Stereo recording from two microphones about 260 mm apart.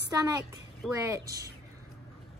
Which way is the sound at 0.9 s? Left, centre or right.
Centre.